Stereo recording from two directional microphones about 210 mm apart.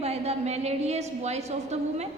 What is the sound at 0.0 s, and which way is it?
A woman's voice, 30° right (ahead or behind).